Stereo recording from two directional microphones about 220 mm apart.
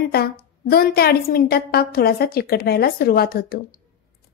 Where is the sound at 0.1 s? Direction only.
45° left (ahead or behind).